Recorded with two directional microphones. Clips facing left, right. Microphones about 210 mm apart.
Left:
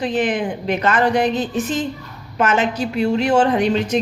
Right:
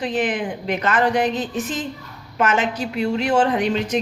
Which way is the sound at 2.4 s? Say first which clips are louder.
Left 2 dB; 30° left (ahead or behind).